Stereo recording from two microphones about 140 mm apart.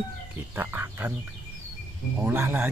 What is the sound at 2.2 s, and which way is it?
Speech, 15° right (ahead or behind).